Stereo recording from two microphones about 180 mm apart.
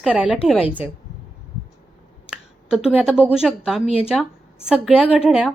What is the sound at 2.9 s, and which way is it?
Speech, 5° right (ahead or behind).